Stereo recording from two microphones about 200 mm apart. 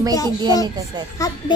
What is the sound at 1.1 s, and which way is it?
Speech, 15° left (ahead or behind).